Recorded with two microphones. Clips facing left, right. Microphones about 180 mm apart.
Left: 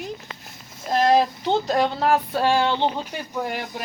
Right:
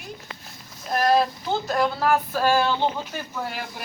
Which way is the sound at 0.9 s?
25° left (ahead or behind).